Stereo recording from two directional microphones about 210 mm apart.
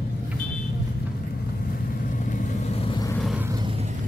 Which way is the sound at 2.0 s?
40° left (ahead or behind).